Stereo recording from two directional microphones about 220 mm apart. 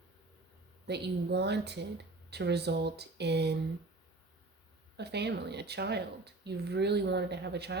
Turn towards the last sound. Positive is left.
turn(degrees=-50)  # may be behind; listen again after turning